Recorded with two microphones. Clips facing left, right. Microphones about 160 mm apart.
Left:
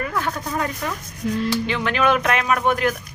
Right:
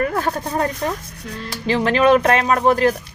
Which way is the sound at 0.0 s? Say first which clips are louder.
Right 5 dB; 50° right (ahead or behind).